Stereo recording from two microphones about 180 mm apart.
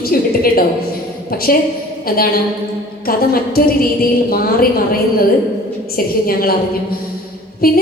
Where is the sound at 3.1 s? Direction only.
55° left (ahead or behind).